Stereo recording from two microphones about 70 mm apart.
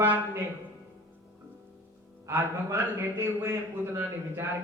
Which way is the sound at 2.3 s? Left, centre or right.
Right.